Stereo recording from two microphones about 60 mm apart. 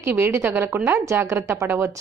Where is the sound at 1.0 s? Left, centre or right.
Right.